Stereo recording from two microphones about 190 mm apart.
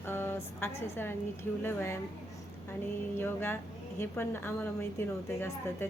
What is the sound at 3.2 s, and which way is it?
A woman's voice, 10° left (ahead or behind).